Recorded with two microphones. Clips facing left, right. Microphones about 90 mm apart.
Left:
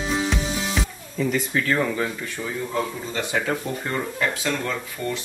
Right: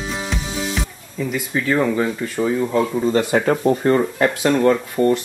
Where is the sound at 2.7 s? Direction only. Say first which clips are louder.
Right 10 dB; 45° right (ahead or behind).